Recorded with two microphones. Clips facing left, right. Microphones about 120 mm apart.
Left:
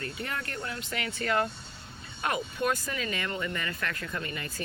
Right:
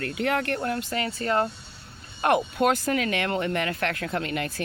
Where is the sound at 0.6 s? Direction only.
50° right (ahead or behind).